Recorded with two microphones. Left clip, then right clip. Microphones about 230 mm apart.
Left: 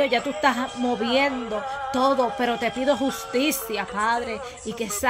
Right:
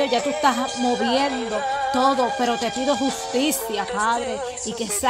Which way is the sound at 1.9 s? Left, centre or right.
Centre.